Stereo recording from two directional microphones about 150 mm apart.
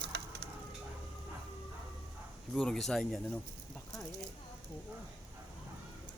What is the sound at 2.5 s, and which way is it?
Speech, 5° left (ahead or behind).